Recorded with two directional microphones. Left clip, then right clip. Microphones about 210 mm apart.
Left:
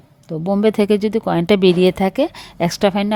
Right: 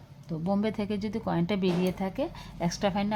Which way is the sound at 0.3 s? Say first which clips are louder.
Left 13 dB; 45° left (ahead or behind).